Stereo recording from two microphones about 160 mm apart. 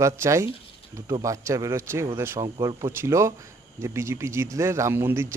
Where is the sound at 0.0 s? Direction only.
20° right (ahead or behind).